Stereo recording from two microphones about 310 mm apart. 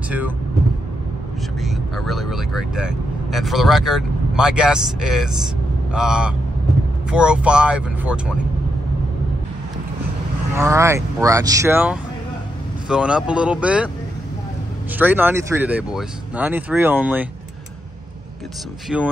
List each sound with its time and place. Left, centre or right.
1.6 s speech: centre
10.6 s speech: centre
15.0 s speech: centre
18.9 s speech: centre